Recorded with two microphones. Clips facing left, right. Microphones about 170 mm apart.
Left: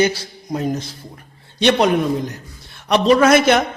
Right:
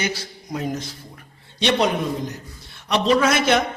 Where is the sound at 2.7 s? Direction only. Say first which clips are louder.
Left 4 dB; 50° left (ahead or behind).